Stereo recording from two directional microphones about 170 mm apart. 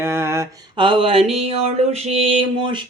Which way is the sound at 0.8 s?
30° right (ahead or behind).